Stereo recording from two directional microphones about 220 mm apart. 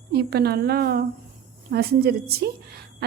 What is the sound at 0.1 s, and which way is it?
A woman's voice, 45° right (ahead or behind).